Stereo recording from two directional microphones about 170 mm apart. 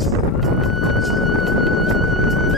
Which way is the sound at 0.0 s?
Centre (ahead or behind).